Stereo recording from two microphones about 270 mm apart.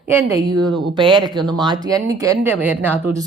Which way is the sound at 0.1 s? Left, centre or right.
Centre.